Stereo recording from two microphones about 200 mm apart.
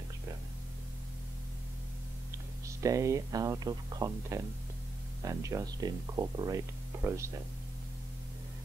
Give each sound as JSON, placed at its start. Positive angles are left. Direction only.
{"t": 2.6, "sound": "speech", "side_deg": -15}